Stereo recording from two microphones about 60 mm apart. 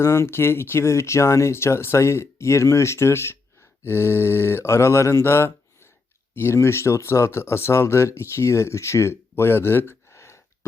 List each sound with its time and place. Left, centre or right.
0.0 s speech: left